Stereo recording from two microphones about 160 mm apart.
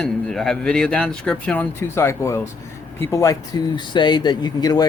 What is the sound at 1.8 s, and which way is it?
Speech, 15° left (ahead or behind).